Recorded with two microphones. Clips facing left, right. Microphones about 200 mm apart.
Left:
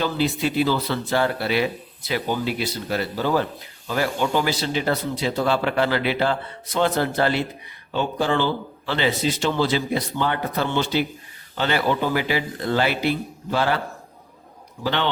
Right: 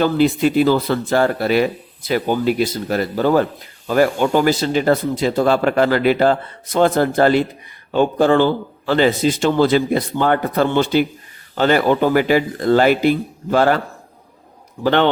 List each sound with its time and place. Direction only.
0.0 s speech: 50° right (ahead or behind)
14.8 s speech: 55° right (ahead or behind)